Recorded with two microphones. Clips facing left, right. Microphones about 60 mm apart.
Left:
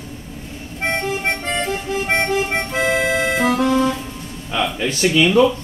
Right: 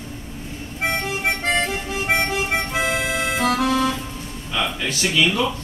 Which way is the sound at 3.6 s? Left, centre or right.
Left.